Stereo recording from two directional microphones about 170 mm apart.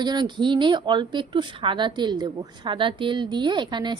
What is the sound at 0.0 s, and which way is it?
A woman's voice, 25° right (ahead or behind).